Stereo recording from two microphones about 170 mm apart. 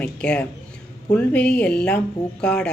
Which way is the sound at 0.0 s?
5° left (ahead or behind).